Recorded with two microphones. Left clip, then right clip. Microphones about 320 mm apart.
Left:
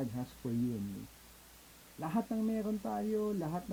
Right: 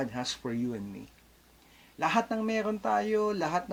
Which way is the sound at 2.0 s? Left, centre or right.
Centre.